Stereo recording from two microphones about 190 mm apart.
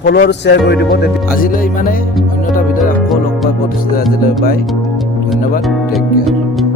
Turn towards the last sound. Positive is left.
turn(degrees=0)  # may be behind; listen again after turning